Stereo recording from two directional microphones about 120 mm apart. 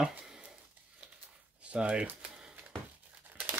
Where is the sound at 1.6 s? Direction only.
10° right (ahead or behind).